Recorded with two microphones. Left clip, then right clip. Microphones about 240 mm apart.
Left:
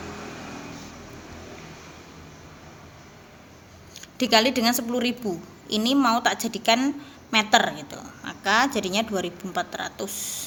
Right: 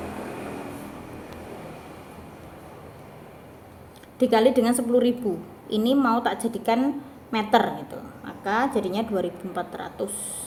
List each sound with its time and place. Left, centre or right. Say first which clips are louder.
4.2 s a woman's voice: right 1 dB; left